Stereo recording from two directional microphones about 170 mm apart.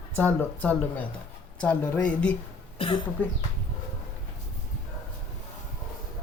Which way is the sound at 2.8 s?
30° left (ahead or behind).